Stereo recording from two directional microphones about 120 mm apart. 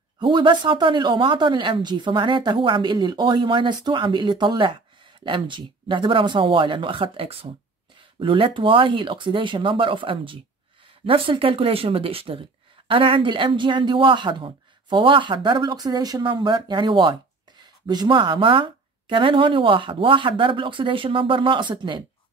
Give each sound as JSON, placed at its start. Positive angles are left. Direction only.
{"t": 0.2, "sound": "speech", "side_deg": -40}